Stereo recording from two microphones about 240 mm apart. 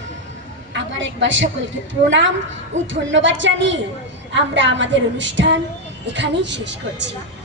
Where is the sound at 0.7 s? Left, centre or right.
Right.